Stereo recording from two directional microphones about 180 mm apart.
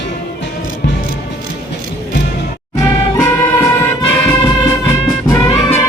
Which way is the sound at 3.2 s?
15° left (ahead or behind).